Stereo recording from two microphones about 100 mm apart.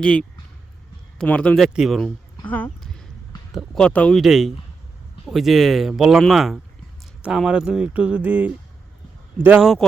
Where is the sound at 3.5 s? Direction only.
5° right (ahead or behind).